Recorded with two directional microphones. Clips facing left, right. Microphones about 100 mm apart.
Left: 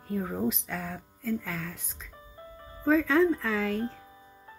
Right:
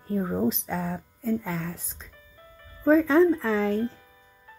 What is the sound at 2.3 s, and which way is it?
Music, 30° left (ahead or behind).